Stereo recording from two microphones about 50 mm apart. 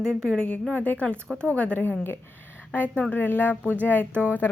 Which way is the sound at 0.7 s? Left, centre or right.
Left.